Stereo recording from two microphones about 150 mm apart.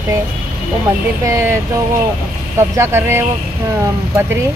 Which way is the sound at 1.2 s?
20° right (ahead or behind).